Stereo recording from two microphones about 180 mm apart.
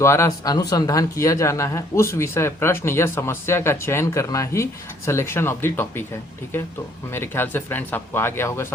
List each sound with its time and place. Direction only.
0.0 s speech: 15° left (ahead or behind)
7.1 s speech: 10° left (ahead or behind)